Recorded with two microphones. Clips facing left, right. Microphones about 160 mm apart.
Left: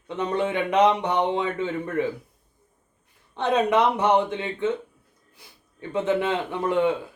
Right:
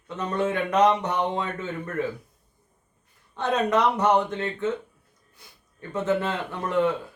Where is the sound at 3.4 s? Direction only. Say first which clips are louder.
Left 2 dB; 15° left (ahead or behind).